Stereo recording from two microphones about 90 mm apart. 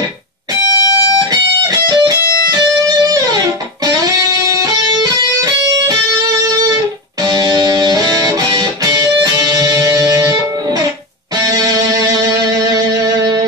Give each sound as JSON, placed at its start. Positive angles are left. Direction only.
{"t": 0.7, "sound": "music", "side_deg": 45}
{"t": 1.9, "sound": "music", "side_deg": -45}
{"t": 7.2, "sound": "music", "side_deg": -50}